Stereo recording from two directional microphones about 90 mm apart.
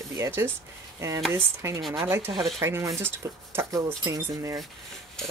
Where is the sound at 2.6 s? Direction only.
30° right (ahead or behind).